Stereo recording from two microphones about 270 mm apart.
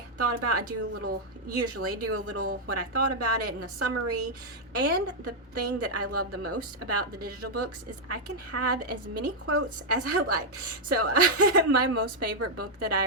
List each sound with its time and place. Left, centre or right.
0.2 s a woman's voice: right